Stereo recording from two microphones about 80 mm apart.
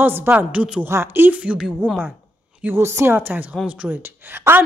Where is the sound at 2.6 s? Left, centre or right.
Right.